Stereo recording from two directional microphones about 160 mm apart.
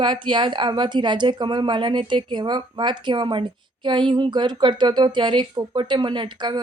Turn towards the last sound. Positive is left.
turn(degrees=-30)  # may be behind; listen again after turning